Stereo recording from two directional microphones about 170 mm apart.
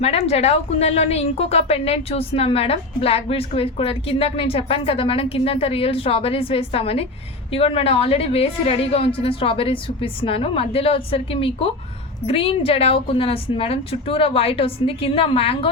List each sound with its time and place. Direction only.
0.0 s a woman's voice: 35° left (ahead or behind)